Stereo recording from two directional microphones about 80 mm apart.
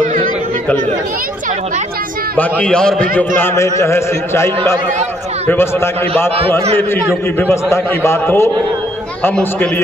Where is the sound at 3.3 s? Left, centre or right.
Left.